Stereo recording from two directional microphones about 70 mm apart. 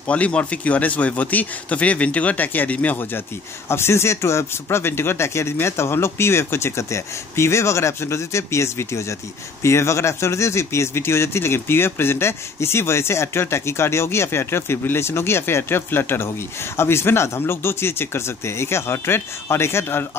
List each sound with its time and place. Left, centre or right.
0.0 s speech: centre
3.6 s speech: left